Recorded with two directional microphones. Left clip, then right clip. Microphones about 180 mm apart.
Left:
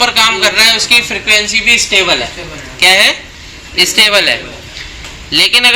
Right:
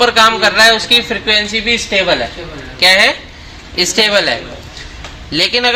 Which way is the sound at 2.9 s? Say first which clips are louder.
Left 1 dB; 50° right (ahead or behind).